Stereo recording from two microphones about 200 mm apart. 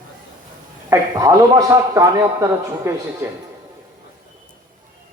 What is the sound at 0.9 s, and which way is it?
A man's voice, 15° right (ahead or behind).